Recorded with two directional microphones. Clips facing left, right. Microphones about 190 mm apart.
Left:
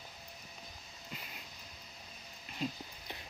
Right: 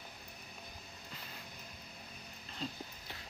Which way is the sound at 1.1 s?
15° left (ahead or behind).